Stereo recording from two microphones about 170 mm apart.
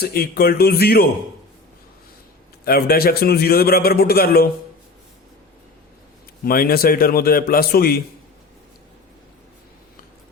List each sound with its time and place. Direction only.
0.0 s a man's voice: 65° left (ahead or behind)
2.6 s a man's voice: 65° left (ahead or behind)
6.4 s a man's voice: 60° left (ahead or behind)